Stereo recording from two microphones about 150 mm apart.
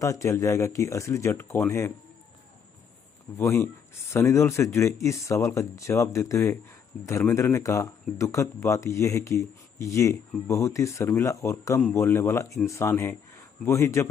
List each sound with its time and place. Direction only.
0.0 s speech: 20° left (ahead or behind)
3.3 s speech: 20° left (ahead or behind)